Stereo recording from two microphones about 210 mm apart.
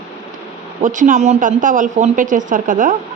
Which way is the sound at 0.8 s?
40° right (ahead or behind).